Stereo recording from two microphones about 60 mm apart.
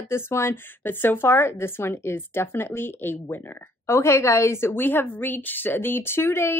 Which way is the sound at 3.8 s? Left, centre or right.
Left.